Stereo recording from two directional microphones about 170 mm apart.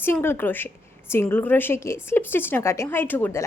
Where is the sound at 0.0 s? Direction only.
15° left (ahead or behind).